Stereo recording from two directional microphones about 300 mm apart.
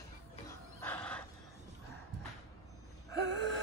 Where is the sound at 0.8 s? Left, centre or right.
Centre.